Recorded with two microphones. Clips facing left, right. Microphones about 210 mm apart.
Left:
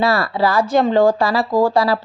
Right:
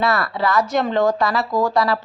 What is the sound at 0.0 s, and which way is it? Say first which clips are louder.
A woman's voice: left 3 dB; 30° left (ahead or behind).